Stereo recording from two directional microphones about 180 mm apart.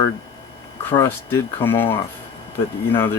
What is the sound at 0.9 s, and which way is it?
Speech, 10° left (ahead or behind).